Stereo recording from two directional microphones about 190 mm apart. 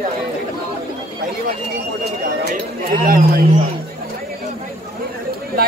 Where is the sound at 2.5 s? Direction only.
50° right (ahead or behind).